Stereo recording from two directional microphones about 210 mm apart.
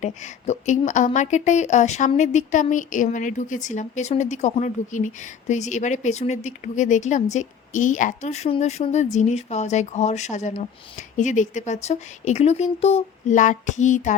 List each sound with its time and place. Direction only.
0.0 s speech: 35° left (ahead or behind)